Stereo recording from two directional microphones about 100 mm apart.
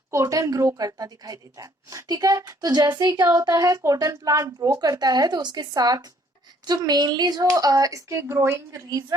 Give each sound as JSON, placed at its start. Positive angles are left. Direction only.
{"t": 0.1, "sound": "a woman's voice", "side_deg": -30}
{"t": 8.9, "sound": "a woman's voice", "side_deg": -40}